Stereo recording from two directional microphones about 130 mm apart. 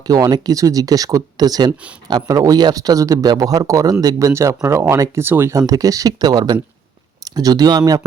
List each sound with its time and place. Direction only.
0.1 s speech: 30° right (ahead or behind)